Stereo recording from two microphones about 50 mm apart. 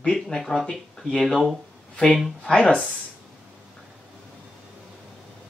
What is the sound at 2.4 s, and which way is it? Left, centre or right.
Speech, centre.